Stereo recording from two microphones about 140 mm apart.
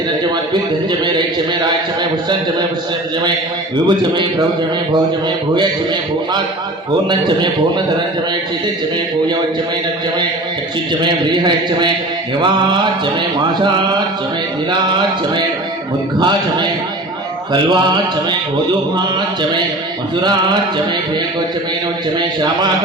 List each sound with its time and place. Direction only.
3.8 s speech: 35° right (ahead or behind)
11.0 s speech: 35° right (ahead or behind)
16.1 s speech: 30° right (ahead or behind)